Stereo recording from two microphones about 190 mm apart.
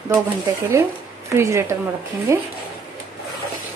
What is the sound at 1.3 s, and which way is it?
A woman's voice, 15° right (ahead or behind).